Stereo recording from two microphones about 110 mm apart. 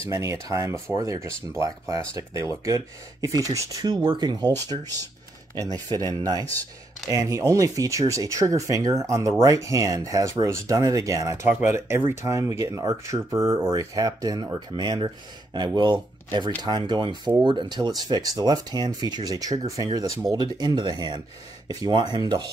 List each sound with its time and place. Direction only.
0.1 s speech: 25° right (ahead or behind)
4.7 s speech: 55° right (ahead or behind)
5.5 s speech: 35° right (ahead or behind)